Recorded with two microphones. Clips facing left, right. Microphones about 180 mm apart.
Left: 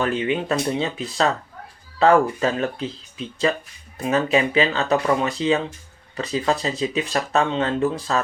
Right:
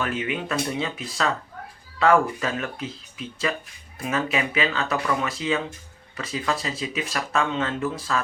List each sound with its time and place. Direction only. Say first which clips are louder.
0.0 s speech: left 5 dB; 30° left (ahead or behind)